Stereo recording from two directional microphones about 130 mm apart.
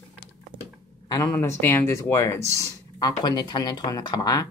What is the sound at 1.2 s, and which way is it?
Speech, 20° left (ahead or behind).